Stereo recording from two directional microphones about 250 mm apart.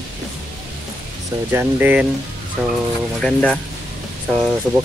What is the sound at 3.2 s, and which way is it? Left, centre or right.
Speech, centre.